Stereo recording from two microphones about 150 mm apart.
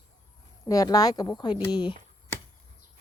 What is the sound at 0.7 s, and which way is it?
Speech, 25° left (ahead or behind).